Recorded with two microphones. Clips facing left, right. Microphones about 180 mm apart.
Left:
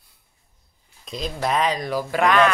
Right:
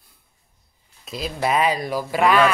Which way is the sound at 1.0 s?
5° right (ahead or behind).